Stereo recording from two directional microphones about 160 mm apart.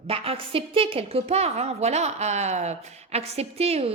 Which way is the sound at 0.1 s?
35° right (ahead or behind).